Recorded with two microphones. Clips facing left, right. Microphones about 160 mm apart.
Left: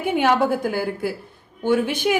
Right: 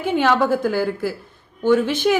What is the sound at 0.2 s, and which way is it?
Speech, 50° left (ahead or behind).